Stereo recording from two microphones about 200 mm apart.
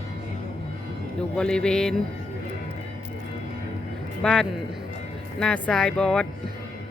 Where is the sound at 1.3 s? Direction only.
5° left (ahead or behind).